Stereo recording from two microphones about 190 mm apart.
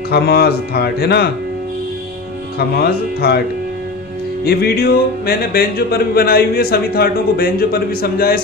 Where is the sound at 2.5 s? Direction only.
55° left (ahead or behind).